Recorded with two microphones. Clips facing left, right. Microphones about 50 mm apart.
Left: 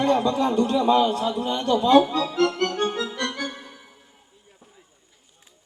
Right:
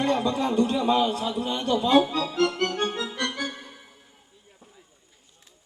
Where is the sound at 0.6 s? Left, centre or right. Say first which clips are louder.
Left 3 dB; centre.